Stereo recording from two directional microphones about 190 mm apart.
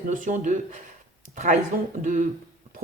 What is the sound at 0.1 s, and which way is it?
Speech, 45° right (ahead or behind).